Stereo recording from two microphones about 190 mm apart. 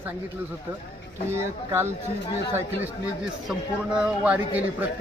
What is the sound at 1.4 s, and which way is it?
Speech, 15° right (ahead or behind).